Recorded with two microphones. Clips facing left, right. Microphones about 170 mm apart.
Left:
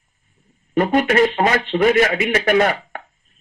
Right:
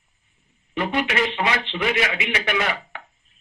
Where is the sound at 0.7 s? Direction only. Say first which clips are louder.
Left 8 dB; 45° left (ahead or behind).